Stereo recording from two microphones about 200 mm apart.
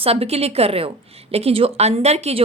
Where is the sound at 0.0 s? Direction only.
30° right (ahead or behind).